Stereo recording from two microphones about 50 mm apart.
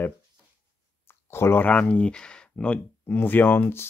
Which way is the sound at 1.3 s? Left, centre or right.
Left.